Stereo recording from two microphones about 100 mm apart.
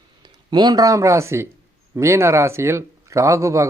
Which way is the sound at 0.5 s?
40° right (ahead or behind).